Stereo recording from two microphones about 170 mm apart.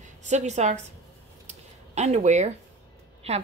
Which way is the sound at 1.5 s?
40° right (ahead or behind).